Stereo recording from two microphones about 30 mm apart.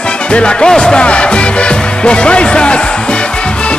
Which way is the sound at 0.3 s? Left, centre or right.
Left.